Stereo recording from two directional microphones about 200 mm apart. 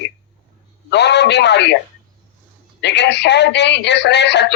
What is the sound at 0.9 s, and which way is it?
Speech, 60° left (ahead or behind).